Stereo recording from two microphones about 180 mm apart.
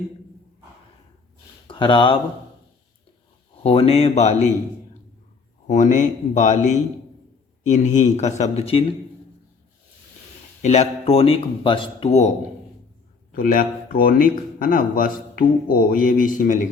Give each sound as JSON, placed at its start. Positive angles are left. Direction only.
{"t": 1.6, "sound": "speech", "side_deg": 30}
{"t": 3.6, "sound": "speech", "side_deg": 35}
{"t": 5.6, "sound": "speech", "side_deg": 45}
{"t": 10.6, "sound": "speech", "side_deg": 40}
{"t": 13.3, "sound": "speech", "side_deg": 50}